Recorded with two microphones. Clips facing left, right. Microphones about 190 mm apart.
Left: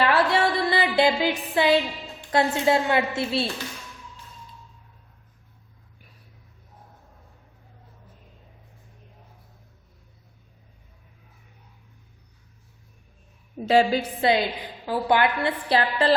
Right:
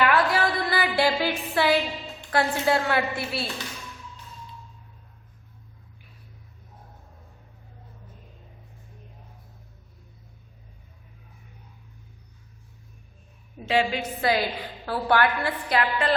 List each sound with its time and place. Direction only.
0.0 s music: 30° left (ahead or behind)
2.3 s a woman's voice: 20° left (ahead or behind)
13.7 s a woman's voice: 40° left (ahead or behind)
14.2 s a woman's voice: 25° left (ahead or behind)